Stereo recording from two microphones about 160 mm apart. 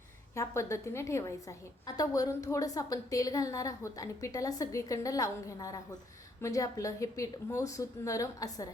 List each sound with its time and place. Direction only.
0.3 s a woman's voice: 20° left (ahead or behind)